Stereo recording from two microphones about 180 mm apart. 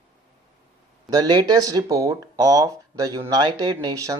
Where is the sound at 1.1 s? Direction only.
20° right (ahead or behind).